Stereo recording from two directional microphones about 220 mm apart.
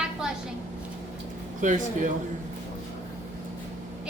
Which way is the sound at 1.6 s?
35° right (ahead or behind).